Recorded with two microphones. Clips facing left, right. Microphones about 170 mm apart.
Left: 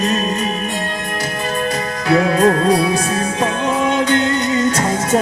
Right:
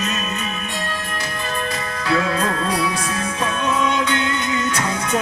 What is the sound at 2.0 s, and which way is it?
Music, 30° left (ahead or behind).